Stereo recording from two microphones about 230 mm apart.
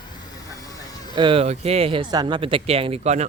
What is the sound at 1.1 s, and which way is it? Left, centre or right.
Speech, right.